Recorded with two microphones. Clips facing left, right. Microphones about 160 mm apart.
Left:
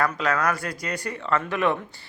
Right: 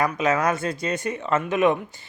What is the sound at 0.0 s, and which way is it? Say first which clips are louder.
Speech: right 2 dB; 20° right (ahead or behind).